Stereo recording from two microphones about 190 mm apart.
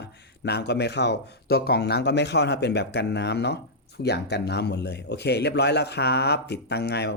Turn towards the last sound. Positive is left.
turn(degrees=60)  # may be behind; listen again after turning